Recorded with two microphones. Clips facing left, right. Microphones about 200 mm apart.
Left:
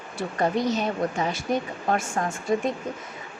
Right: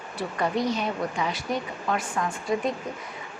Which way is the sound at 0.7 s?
40° left (ahead or behind).